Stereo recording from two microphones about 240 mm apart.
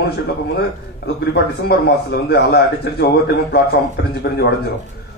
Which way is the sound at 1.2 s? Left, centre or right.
Left.